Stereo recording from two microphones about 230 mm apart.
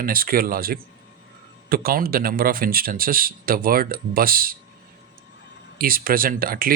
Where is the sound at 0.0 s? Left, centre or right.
Right.